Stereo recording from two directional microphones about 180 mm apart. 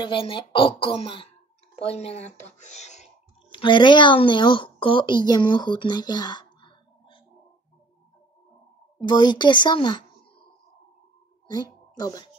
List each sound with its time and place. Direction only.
0.0 s speech: 30° left (ahead or behind)
2.6 s a sound: 40° left (ahead or behind)
3.5 s a woman's voice: 25° left (ahead or behind)
9.0 s speech: 25° left (ahead or behind)
11.5 s a child's voice: 20° left (ahead or behind)